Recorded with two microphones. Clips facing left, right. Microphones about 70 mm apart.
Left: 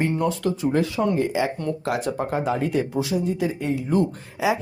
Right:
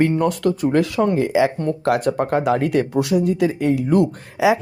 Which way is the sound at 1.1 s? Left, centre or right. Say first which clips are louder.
Right 5 dB; right.